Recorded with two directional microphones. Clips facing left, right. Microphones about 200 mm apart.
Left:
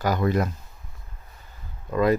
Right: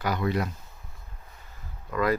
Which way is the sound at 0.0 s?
45° left (ahead or behind).